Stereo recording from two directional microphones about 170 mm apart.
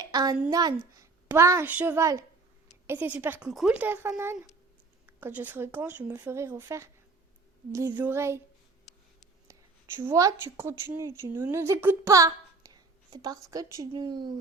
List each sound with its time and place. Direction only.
0.0 s a sound: 20° right (ahead or behind)
0.5 s a woman's voice: 25° right (ahead or behind)
9.5 s speech: 15° right (ahead or behind)